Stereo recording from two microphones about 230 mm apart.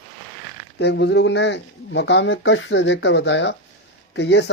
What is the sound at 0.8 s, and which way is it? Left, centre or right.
Speech, left.